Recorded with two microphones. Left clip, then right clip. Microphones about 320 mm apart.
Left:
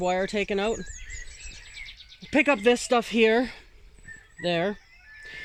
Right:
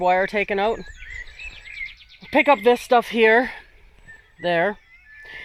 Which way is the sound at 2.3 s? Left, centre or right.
Centre.